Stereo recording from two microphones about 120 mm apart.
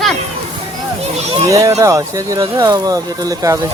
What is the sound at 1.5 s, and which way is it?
Speech, 30° right (ahead or behind).